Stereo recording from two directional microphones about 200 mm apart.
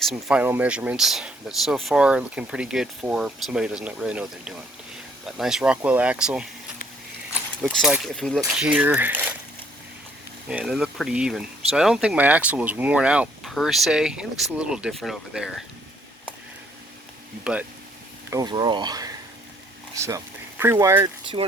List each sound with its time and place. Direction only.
0.0 s speech: centre (ahead or behind)
10.5 s speech: 5° right (ahead or behind)
17.4 s speech: 5° right (ahead or behind)
18.3 s speech: 20° right (ahead or behind)